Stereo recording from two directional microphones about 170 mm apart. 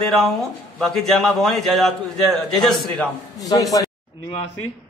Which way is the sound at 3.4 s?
20° left (ahead or behind).